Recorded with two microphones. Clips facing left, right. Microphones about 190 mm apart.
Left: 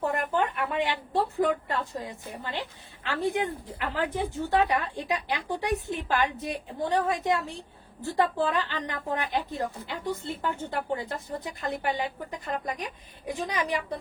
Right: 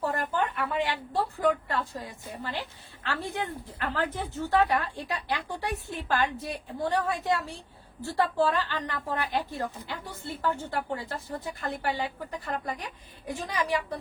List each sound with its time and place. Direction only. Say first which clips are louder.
0.1 s a woman's voice: left 2 dB; 20° left (ahead or behind)